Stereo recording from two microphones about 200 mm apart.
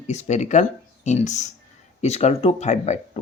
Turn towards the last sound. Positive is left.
turn(degrees=35)  # may be behind; listen again after turning